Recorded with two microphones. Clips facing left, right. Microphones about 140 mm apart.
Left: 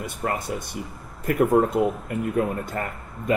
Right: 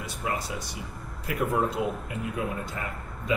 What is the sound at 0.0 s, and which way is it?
Speech, 55° left (ahead or behind).